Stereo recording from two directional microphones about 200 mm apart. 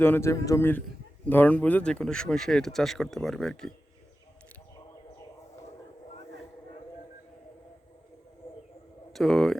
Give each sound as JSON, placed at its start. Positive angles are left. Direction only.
{"t": 0.0, "sound": "a man's voice", "side_deg": 10}
{"t": 8.4, "sound": "a sound", "side_deg": 30}
{"t": 9.1, "sound": "speech", "side_deg": 0}